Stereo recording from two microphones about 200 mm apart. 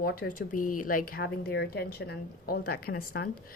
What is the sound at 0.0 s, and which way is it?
Speech, 50° left (ahead or behind).